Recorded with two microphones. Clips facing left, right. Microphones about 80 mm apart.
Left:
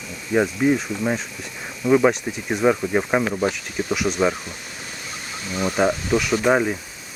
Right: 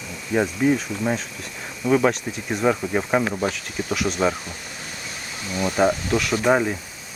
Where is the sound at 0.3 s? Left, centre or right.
Centre.